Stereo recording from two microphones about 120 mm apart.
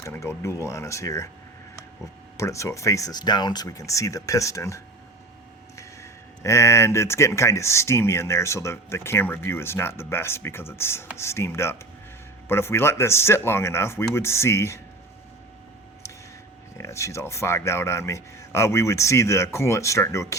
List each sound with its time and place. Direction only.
0.0 s speech: 25° left (ahead or behind)
2.4 s speech: 25° left (ahead or behind)
16.7 s speech: 25° left (ahead or behind)